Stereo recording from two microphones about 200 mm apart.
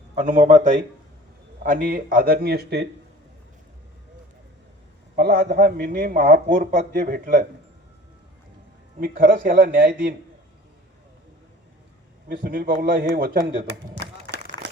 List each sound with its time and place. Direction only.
0.2 s a man's voice: 40° right (ahead or behind); by 2.8 s 55° right (ahead or behind)
5.1 s a man's voice: 50° right (ahead or behind)
9.0 s a man's voice: 45° right (ahead or behind)
12.3 s a man's voice: 50° right (ahead or behind)
13.7 s a sound: 60° right (ahead or behind)